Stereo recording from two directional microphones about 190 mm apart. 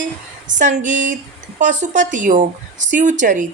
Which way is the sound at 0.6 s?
40° right (ahead or behind).